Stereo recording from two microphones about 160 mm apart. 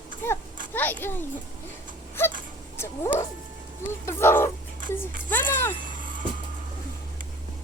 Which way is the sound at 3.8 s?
15° left (ahead or behind).